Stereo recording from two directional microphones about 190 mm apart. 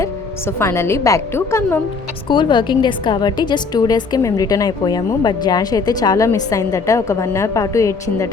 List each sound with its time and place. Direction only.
0.0 s a woman's voice: 15° left (ahead or behind)
2.3 s a woman's voice: 25° left (ahead or behind)